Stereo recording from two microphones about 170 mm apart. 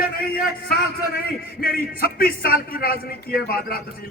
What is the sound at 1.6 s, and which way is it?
A man's voice, 60° left (ahead or behind).